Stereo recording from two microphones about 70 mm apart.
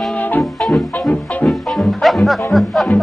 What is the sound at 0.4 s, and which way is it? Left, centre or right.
Music, centre.